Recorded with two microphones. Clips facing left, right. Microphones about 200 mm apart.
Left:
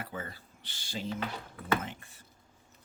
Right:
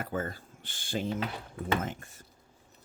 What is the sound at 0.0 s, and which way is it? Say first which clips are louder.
Speech: right 7 dB; 45° right (ahead or behind).